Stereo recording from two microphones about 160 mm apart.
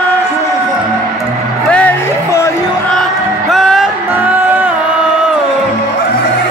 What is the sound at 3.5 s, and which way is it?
Music, centre (ahead or behind).